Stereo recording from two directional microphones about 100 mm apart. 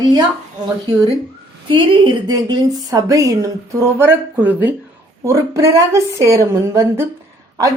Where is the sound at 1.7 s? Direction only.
55° right (ahead or behind); by 4.7 s 15° right (ahead or behind).